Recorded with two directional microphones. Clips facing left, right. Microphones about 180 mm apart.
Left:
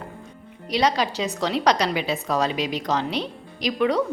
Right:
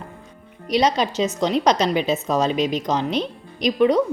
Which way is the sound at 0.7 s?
20° right (ahead or behind).